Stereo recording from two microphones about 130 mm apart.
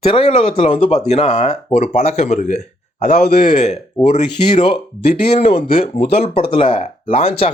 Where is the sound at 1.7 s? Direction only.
60° left (ahead or behind).